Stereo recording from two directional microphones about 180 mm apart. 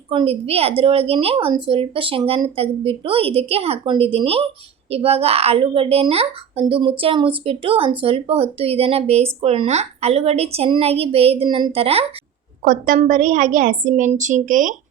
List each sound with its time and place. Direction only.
0.1 s speech: 30° right (ahead or behind)
12.6 s a woman's voice: 50° right (ahead or behind)